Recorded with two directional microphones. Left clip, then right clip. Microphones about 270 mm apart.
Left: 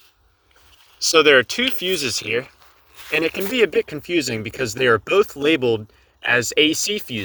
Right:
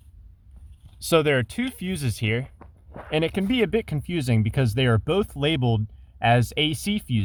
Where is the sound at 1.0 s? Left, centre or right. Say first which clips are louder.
Left 7 dB; centre.